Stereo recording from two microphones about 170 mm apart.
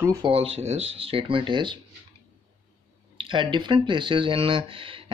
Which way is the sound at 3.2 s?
30° right (ahead or behind).